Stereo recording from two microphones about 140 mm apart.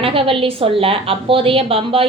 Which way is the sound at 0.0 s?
40° right (ahead or behind).